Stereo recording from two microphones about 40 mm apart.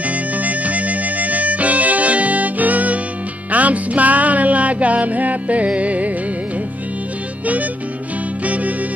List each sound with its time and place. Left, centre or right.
0.0 s music: right
8.5 s music: right